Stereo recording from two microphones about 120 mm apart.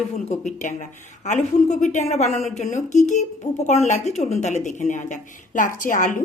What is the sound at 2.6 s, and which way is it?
Speech, 90° left.